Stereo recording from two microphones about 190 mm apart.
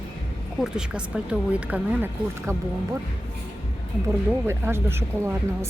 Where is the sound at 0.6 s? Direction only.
5° right (ahead or behind).